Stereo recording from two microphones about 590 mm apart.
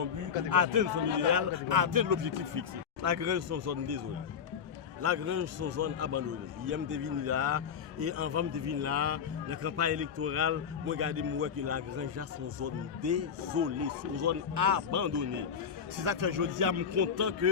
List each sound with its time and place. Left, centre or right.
0.5 s a man's voice: right
5.0 s a man's voice: right